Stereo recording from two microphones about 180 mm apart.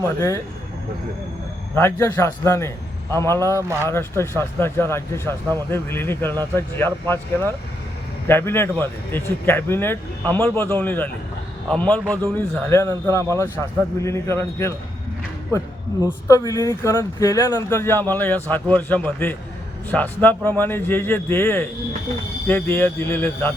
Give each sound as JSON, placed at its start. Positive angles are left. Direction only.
{"t": 0.0, "sound": "speech", "side_deg": 15}
{"t": 1.7, "sound": "speech", "side_deg": 15}
{"t": 16.2, "sound": "speech", "side_deg": 20}